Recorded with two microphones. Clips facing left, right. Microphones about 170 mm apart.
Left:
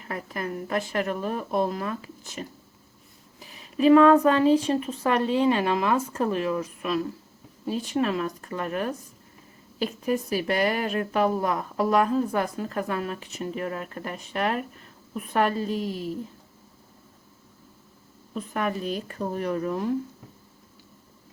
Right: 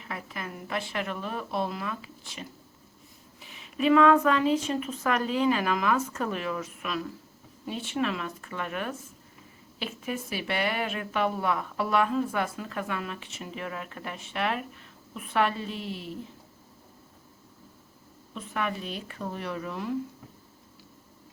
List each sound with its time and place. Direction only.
0.0 s speech: 45° left (ahead or behind)
18.3 s speech: 40° left (ahead or behind)